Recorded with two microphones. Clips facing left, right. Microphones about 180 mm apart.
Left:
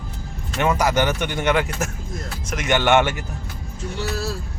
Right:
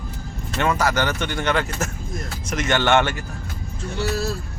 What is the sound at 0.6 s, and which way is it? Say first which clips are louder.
A man's voice: left 2 dB; 15° left (ahead or behind).